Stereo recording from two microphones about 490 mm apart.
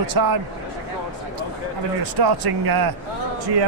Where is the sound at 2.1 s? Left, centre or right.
Right.